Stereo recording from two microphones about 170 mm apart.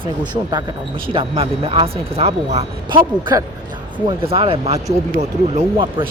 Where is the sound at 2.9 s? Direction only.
25° right (ahead or behind).